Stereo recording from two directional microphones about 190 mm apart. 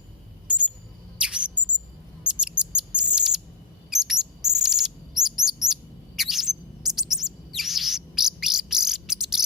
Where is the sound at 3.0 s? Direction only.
5° right (ahead or behind).